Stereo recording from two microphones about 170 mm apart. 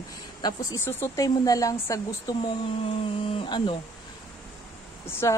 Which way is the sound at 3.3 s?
30° left (ahead or behind).